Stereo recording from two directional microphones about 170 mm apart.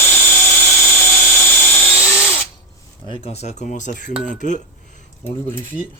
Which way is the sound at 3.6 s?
50° left (ahead or behind).